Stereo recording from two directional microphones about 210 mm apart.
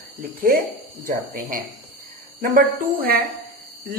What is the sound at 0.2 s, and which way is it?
Speech, 40° right (ahead or behind).